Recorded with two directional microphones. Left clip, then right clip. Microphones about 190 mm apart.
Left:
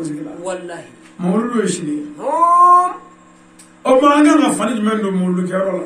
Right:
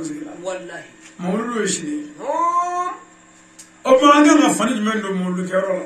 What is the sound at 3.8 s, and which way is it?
A man's voice, 5° right (ahead or behind).